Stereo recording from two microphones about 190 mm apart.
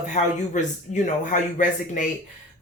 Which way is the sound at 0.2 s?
40° left (ahead or behind).